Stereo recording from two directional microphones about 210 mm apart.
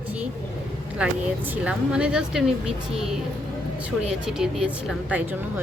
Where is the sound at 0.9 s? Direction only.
5° right (ahead or behind).